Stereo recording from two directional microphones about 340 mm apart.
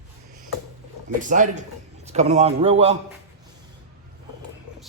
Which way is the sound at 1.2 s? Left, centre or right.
Right.